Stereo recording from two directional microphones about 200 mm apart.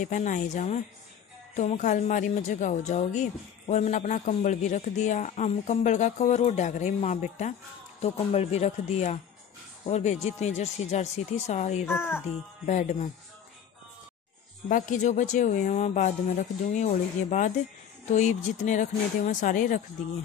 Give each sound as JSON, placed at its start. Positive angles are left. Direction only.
{"t": 0.0, "sound": "speech", "side_deg": 40}
{"t": 11.9, "sound": "speech", "side_deg": 10}
{"t": 12.6, "sound": "speech", "side_deg": 40}
{"t": 14.7, "sound": "speech", "side_deg": 40}